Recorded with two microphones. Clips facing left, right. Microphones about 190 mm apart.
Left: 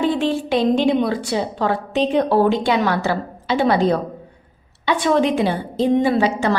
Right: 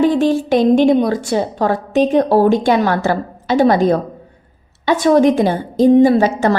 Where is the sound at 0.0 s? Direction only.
40° right (ahead or behind).